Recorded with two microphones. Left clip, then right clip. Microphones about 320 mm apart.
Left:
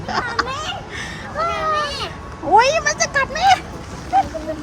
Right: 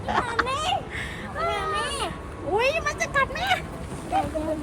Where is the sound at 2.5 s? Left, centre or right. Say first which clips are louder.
Left 10 dB; centre.